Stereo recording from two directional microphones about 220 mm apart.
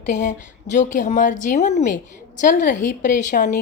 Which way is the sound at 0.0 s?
35° left (ahead or behind).